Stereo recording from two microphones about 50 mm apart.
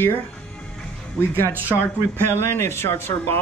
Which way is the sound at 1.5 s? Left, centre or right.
Right.